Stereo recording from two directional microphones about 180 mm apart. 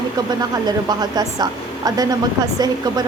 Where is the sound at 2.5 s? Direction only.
20° right (ahead or behind).